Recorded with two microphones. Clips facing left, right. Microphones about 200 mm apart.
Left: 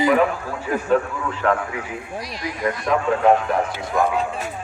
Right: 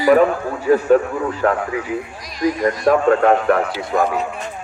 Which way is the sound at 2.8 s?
60° right (ahead or behind).